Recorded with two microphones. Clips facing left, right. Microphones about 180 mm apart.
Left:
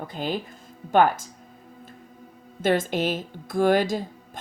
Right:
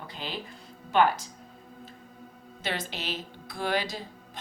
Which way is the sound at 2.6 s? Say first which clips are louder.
Left 12 dB; 50° left (ahead or behind).